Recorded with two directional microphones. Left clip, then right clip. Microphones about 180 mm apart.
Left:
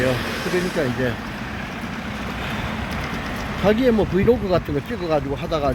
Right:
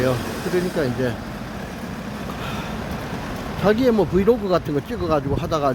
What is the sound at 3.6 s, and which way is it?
Speech, centre (ahead or behind).